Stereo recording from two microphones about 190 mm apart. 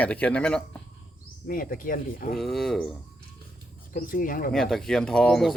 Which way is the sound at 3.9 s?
50° left (ahead or behind).